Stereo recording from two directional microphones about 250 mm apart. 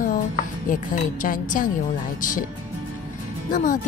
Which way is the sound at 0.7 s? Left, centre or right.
Left.